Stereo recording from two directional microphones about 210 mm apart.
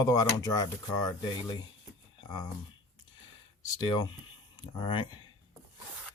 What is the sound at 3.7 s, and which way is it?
Speech, 20° left (ahead or behind).